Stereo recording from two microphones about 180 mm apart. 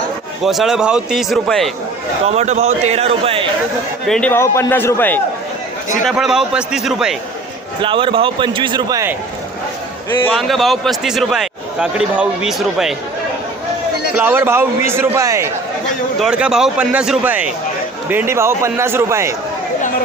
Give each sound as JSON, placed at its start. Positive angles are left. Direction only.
{"t": 0.4, "sound": "a man's voice", "side_deg": 0}
{"t": 2.2, "sound": "a man's voice", "side_deg": -35}
{"t": 4.0, "sound": "a man's voice", "side_deg": 0}
{"t": 4.3, "sound": "a man's voice", "side_deg": 15}
{"t": 6.1, "sound": "a man's voice", "side_deg": 0}
{"t": 7.8, "sound": "a man's voice", "side_deg": -30}
{"t": 10.2, "sound": "a man's voice", "side_deg": 0}
{"t": 14.2, "sound": "a man's voice", "side_deg": -10}
{"t": 16.2, "sound": "a man's voice", "side_deg": -5}